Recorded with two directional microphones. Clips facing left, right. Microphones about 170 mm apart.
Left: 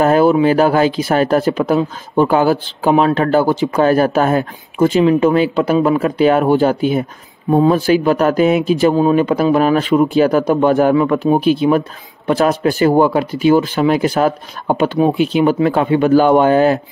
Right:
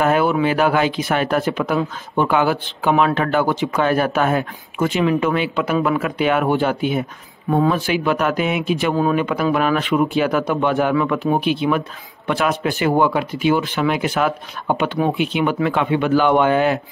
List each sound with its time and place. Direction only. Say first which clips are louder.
0.0 s speech: left 6 dB; 35° left (ahead or behind)